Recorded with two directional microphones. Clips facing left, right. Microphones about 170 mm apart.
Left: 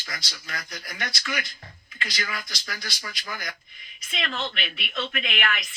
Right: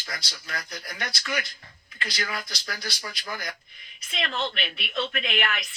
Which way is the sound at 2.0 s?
30° right (ahead or behind).